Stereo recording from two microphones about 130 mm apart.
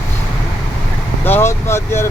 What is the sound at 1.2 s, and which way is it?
Speech, 20° left (ahead or behind).